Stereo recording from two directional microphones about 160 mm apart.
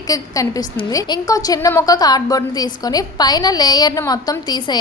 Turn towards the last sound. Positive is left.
turn(degrees=25)  # may be behind; listen again after turning